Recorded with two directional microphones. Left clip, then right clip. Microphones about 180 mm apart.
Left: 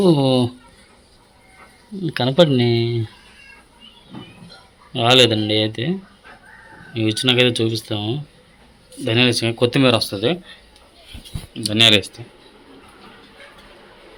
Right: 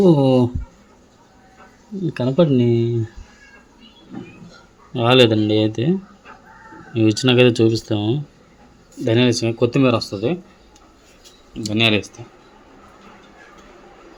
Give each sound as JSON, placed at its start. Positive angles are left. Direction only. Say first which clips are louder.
{"t": 0.0, "sound": "speech", "louder": "right 2 dB", "side_deg": -5}
{"t": 2.0, "sound": "speech", "louder": "left 2 dB", "side_deg": 5}
{"t": 4.9, "sound": "speech", "louder": "even", "side_deg": -10}
{"t": 11.5, "sound": "speech", "louder": "left 4 dB", "side_deg": -5}